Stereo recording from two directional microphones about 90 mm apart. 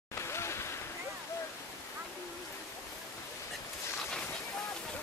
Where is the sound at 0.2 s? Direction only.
30° left (ahead or behind).